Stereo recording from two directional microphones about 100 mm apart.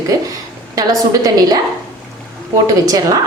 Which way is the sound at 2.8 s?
40° right (ahead or behind).